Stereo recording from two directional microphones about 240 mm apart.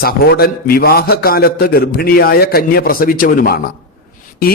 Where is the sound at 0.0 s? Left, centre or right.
Left.